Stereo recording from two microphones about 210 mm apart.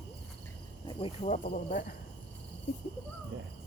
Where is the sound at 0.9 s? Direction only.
20° left (ahead or behind).